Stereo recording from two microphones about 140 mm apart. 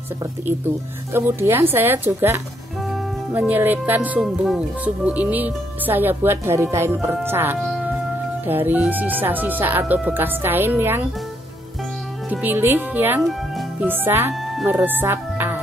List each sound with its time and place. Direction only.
1.1 s speech: 15° right (ahead or behind)
12.3 s speech: 10° right (ahead or behind)
13.2 s music: centre (ahead or behind)
13.8 s speech: 15° right (ahead or behind)